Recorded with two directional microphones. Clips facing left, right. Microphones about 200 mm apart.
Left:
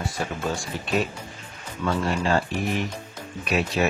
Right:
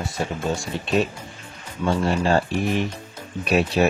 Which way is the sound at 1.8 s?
30° right (ahead or behind).